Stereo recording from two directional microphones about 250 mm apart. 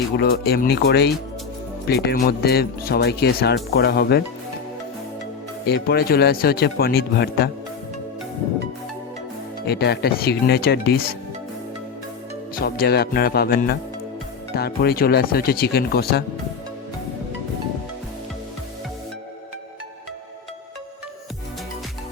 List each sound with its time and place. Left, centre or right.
0.2 s speech: left
5.6 s speech: left
9.6 s speech: left
12.5 s speech: left